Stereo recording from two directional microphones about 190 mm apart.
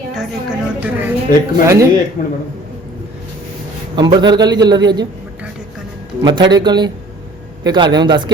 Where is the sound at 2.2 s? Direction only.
35° left (ahead or behind).